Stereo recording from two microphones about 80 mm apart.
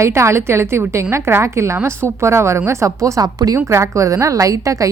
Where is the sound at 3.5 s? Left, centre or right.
Right.